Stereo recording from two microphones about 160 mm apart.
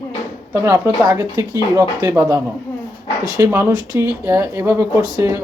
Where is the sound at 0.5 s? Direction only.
20° right (ahead or behind).